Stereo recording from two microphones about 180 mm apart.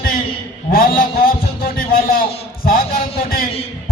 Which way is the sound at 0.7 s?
55° left (ahead or behind).